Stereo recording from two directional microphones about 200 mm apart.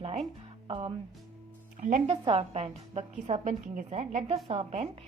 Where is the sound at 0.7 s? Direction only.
25° right (ahead or behind).